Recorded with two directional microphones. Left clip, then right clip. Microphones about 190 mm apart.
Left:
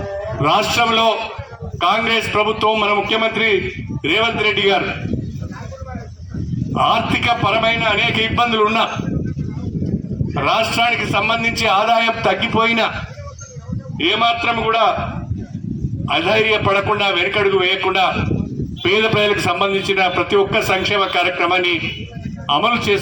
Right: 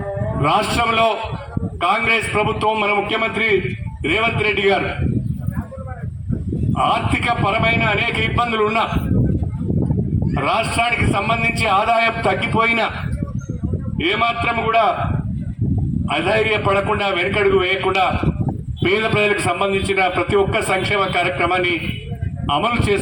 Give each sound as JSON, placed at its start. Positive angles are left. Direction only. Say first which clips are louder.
{"t": 0.4, "sound": "a man's voice", "louder": "left 2 dB", "side_deg": 30}
{"t": 6.7, "sound": "a man's voice", "louder": "left 2 dB", "side_deg": 30}
{"t": 10.3, "sound": "a man's voice", "louder": "left 2 dB", "side_deg": 30}
{"t": 14.0, "sound": "a man's voice", "louder": "left 2 dB", "side_deg": 30}
{"t": 16.0, "sound": "a man's voice", "louder": "left 2 dB", "side_deg": 30}
{"t": 18.8, "sound": "a man's voice", "louder": "left 2 dB", "side_deg": 30}